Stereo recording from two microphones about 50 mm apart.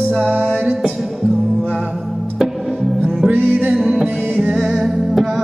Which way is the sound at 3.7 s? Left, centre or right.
Centre.